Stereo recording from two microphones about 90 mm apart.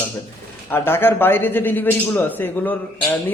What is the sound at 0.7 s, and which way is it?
A man's voice, 25° left (ahead or behind).